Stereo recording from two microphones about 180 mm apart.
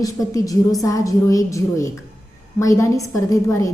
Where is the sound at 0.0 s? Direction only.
20° left (ahead or behind).